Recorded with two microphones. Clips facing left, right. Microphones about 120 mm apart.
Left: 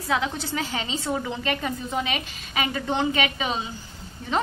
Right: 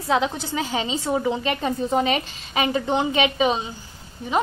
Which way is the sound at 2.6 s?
20° right (ahead or behind).